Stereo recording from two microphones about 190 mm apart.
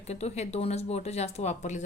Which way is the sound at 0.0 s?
35° left (ahead or behind).